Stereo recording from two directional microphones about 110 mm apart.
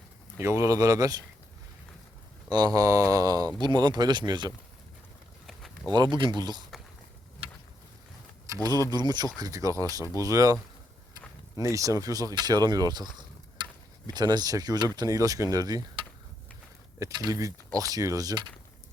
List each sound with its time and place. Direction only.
0.3 s speech: 25° right (ahead or behind)
2.5 s speech: 35° right (ahead or behind)
5.5 s a sound: centre (ahead or behind)
5.9 s speech: 40° right (ahead or behind)
8.6 s speech: 35° right (ahead or behind)
17.0 s speech: 30° right (ahead or behind)